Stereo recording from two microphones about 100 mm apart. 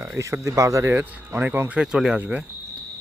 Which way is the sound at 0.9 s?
20° right (ahead or behind).